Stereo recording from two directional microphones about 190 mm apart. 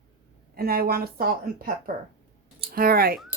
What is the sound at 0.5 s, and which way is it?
A woman's voice, 55° right (ahead or behind).